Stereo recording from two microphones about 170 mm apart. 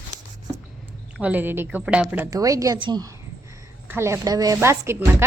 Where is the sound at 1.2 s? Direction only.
10° right (ahead or behind).